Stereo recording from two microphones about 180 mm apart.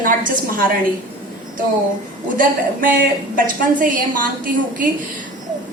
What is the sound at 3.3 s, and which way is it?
A woman's voice, 50° right (ahead or behind).